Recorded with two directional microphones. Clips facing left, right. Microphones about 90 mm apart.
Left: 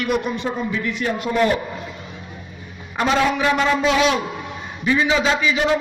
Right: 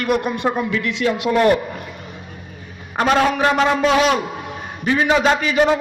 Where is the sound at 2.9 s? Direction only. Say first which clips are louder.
Right 2 dB; 55° right (ahead or behind).